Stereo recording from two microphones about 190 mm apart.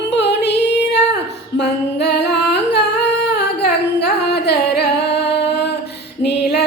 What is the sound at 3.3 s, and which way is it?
Singing, 60° left (ahead or behind).